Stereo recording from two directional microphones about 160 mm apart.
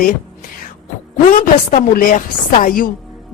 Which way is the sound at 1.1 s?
60° left (ahead or behind).